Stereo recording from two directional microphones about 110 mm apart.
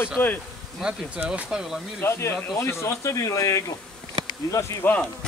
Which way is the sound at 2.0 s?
25° left (ahead or behind).